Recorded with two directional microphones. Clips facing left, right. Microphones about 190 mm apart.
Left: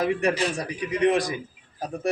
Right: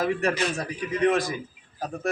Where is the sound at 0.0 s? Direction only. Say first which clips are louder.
Left 1 dB; 15° left (ahead or behind).